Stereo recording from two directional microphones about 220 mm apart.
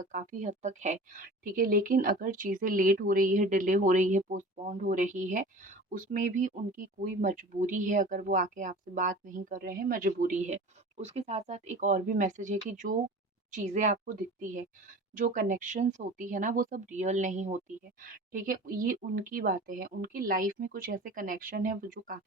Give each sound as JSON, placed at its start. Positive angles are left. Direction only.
{"t": 0.0, "sound": "speech", "side_deg": -35}